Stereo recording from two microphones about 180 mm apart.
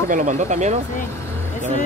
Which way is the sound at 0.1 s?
40° right (ahead or behind).